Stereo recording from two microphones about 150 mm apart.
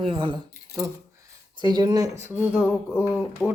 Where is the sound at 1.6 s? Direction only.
30° right (ahead or behind).